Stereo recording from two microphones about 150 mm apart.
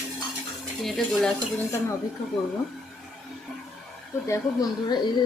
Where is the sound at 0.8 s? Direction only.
Centre (ahead or behind).